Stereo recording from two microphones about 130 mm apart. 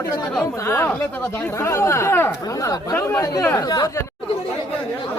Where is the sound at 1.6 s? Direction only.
20° left (ahead or behind).